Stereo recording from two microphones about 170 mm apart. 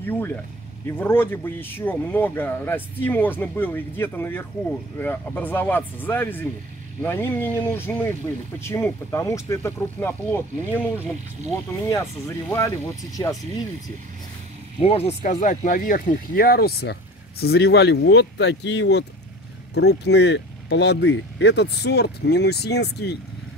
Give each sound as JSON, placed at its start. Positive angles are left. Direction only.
{"t": 0.0, "sound": "speech", "side_deg": 10}
{"t": 12.4, "sound": "speech", "side_deg": 15}
{"t": 14.8, "sound": "speech", "side_deg": 35}